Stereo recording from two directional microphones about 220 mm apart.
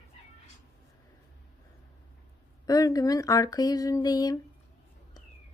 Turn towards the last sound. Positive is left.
turn(degrees=15)  # may be behind; listen again after turning